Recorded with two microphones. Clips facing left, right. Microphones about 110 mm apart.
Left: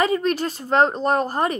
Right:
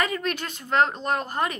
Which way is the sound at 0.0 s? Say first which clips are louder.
Left 7 dB; 30° left (ahead or behind).